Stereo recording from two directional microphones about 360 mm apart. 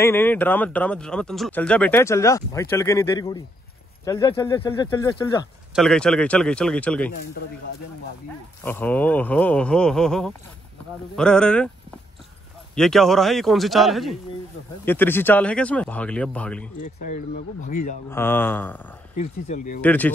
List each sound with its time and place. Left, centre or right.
0.0 s speech: centre
8.6 s speech: centre
12.7 s speech: centre
17.0 s speech: left
18.1 s speech: centre
19.1 s speech: centre
19.8 s speech: centre